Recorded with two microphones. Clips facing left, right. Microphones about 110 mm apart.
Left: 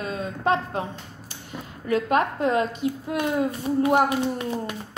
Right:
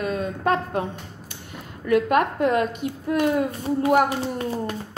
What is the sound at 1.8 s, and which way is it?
A woman's voice, 55° right (ahead or behind).